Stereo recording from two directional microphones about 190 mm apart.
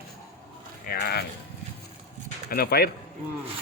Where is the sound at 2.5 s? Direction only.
55° left (ahead or behind).